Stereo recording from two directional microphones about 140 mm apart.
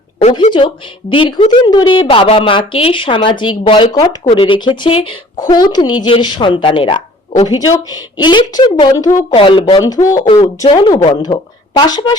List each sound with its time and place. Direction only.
0.3 s speech: 35° left (ahead or behind)
9.3 s speech: 35° left (ahead or behind)
9.8 s speech: 25° left (ahead or behind)